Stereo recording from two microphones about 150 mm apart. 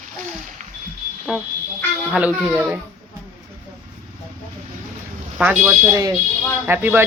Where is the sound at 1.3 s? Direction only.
10° right (ahead or behind).